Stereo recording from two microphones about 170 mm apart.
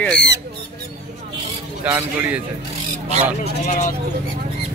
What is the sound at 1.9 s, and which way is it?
Speech, 10° right (ahead or behind).